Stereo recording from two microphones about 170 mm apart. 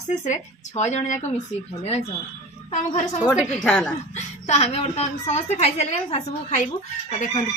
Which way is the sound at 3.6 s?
5° left (ahead or behind).